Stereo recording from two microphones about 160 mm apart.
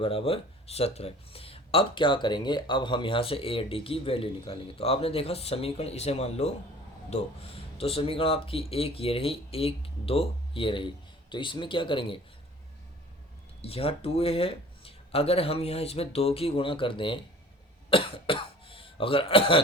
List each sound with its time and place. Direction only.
0.0 s speech: 35° left (ahead or behind)
13.6 s speech: 35° left (ahead or behind)